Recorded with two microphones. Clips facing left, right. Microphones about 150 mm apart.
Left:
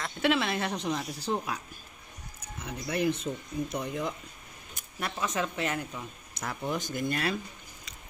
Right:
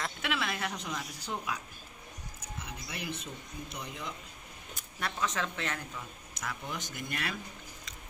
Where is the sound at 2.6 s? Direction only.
50° left (ahead or behind).